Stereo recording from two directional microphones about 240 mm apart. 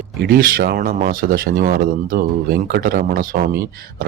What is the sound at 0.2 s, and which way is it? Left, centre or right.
Speech, right.